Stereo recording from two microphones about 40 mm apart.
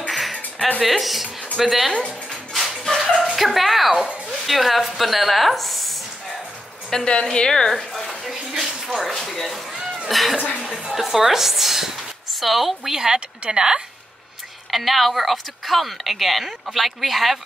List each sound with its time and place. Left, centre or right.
0.1 s music: centre
0.8 s a woman's voice: centre
2.5 s a sound: centre
3.2 s a woman's voice: centre
6.9 s speech: centre
7.7 s a sound: centre
9.1 s a woman's voice: centre
12.9 s speech: centre
14.7 s a woman's voice: centre